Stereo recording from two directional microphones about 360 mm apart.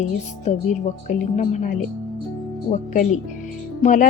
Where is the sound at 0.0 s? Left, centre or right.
Centre.